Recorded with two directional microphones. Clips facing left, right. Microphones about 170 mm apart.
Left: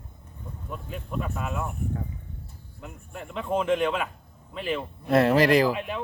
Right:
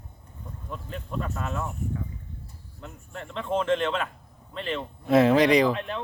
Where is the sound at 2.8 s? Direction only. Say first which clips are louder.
Even; 10° left (ahead or behind).